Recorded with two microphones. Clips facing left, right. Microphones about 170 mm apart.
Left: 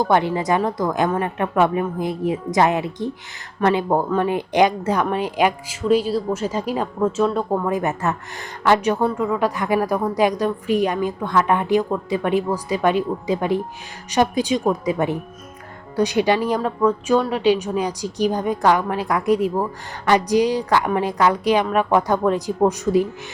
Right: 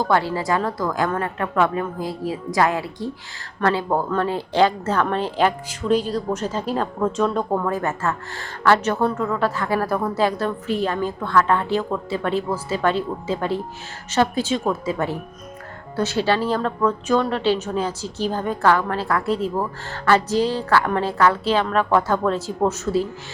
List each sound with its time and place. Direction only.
0.0 s speech: 20° left (ahead or behind)